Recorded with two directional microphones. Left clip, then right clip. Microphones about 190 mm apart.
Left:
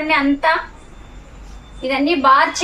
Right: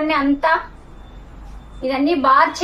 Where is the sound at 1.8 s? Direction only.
10° right (ahead or behind).